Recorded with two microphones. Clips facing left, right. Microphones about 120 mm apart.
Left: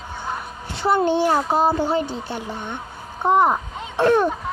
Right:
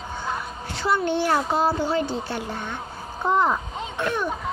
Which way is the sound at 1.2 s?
20° left (ahead or behind).